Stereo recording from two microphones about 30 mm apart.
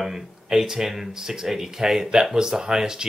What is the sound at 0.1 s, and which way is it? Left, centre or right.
Speech, centre.